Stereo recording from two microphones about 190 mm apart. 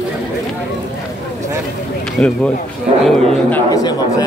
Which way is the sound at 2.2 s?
5° left (ahead or behind).